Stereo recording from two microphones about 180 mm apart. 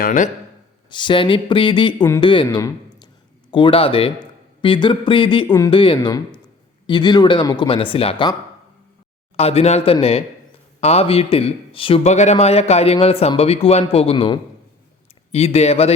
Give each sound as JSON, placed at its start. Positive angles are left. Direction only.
{"t": 0.0, "sound": "speech", "side_deg": 45}
{"t": 0.9, "sound": "speech", "side_deg": 25}
{"t": 9.3, "sound": "a man's voice", "side_deg": 35}